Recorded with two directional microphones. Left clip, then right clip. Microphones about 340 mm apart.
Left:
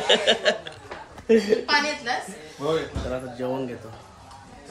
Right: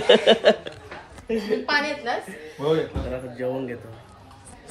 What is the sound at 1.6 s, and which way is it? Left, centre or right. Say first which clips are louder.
Speech: left 1 dB; centre.